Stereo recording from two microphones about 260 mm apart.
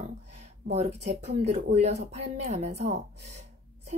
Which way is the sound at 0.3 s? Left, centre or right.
Right.